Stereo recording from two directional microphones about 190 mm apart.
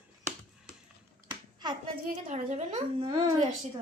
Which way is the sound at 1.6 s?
25° right (ahead or behind).